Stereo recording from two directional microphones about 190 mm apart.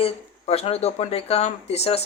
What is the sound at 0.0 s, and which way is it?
Speech, 30° left (ahead or behind).